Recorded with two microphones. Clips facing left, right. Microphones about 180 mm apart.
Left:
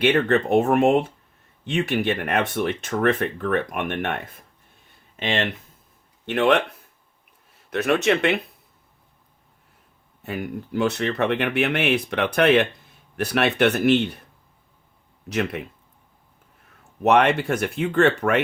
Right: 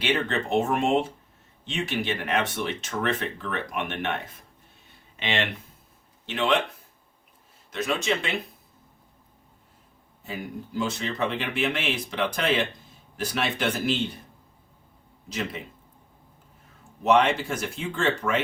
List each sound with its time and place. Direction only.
0.0 s speech: 55° left (ahead or behind)
5.2 s speech: 45° left (ahead or behind)
6.2 s speech: 60° left (ahead or behind)
7.7 s speech: 65° left (ahead or behind)
10.2 s speech: 65° left (ahead or behind)
15.3 s speech: 65° left (ahead or behind)
17.0 s speech: 60° left (ahead or behind)